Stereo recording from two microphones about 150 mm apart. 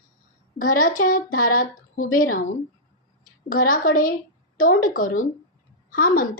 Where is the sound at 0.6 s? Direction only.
65° left (ahead or behind).